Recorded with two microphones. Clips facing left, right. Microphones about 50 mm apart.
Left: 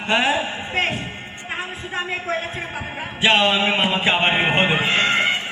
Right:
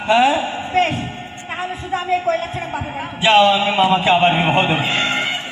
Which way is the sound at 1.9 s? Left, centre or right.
Left.